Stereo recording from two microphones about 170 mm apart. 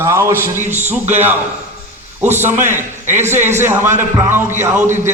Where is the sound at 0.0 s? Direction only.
15° right (ahead or behind).